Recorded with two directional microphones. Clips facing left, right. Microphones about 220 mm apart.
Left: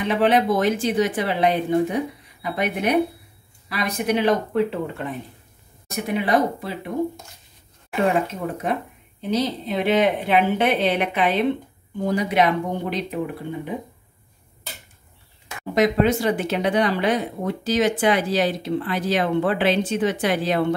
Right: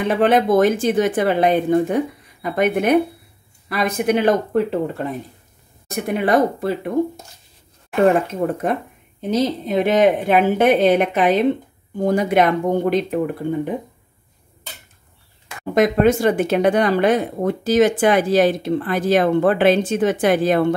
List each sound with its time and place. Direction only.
0.1 s speech: 50° right (ahead or behind)
7.9 s speech: 50° right (ahead or behind)
15.7 s speech: 50° right (ahead or behind)